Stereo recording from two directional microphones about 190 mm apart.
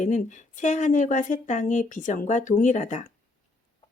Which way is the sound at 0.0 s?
40° left (ahead or behind).